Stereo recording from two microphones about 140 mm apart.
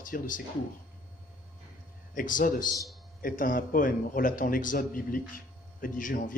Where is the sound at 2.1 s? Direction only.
70° left (ahead or behind).